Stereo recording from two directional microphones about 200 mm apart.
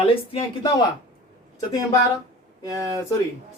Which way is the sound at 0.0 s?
25° left (ahead or behind).